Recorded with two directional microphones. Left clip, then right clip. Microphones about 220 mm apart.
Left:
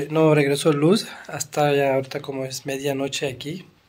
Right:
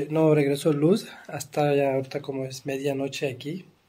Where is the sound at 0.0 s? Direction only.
Centre (ahead or behind).